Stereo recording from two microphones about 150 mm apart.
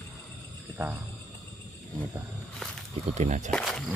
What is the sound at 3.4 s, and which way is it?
Speech, 5° left (ahead or behind).